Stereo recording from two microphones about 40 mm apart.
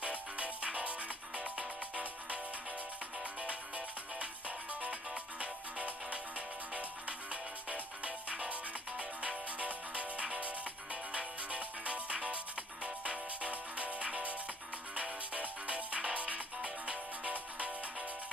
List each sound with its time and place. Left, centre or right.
0.0 s music: right
3.4 s music: right